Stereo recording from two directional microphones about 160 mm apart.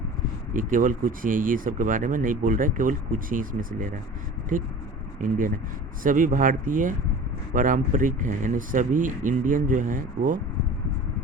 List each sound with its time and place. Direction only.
0.5 s speech: 55° right (ahead or behind)
5.2 s speech: 55° right (ahead or behind)